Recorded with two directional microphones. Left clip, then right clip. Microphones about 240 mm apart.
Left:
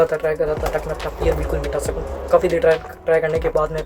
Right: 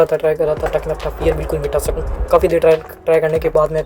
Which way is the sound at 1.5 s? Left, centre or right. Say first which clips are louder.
Right 4 dB; right.